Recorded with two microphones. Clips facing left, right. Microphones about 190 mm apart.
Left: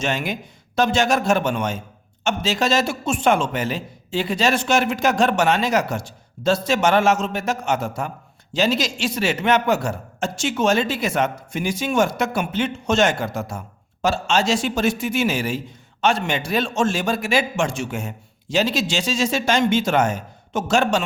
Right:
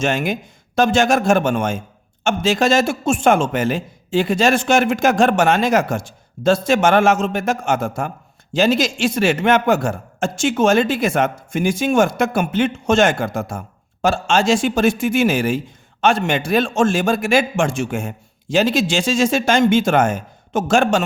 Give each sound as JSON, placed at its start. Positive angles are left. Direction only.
{"t": 0.0, "sound": "a man's voice", "side_deg": -50}